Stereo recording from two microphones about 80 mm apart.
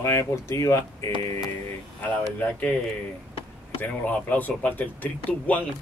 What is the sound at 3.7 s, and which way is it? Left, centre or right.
Speech, centre.